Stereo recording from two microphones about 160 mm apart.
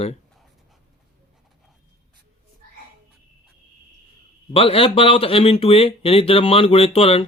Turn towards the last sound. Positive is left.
turn(degrees=35)  # may be behind; listen again after turning